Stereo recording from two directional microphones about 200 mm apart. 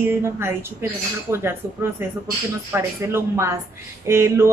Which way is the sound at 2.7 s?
10° right (ahead or behind).